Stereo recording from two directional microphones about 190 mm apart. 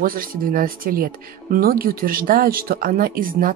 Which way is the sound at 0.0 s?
50° right (ahead or behind).